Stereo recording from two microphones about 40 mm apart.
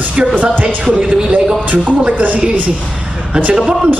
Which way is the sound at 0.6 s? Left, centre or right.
Right.